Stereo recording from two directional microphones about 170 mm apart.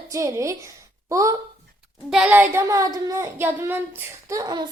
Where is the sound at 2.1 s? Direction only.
10° right (ahead or behind).